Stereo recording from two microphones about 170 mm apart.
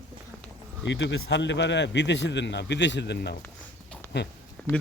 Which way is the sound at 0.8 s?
90° left.